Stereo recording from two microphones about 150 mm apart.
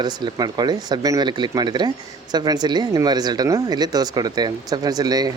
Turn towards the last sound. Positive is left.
turn(degrees=-25)  # may be behind; listen again after turning